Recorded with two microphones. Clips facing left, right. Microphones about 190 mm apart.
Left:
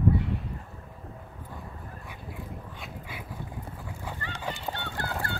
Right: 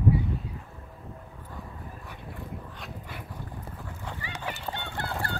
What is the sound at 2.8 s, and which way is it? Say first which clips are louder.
Dog: even; centre (ahead or behind).